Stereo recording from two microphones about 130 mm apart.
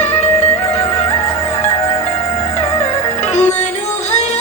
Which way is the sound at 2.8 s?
60° left (ahead or behind).